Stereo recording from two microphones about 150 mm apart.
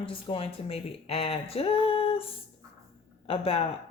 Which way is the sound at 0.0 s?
35° left (ahead or behind).